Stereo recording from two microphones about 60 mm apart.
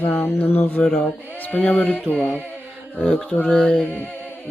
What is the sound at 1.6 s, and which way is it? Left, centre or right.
Speech, left.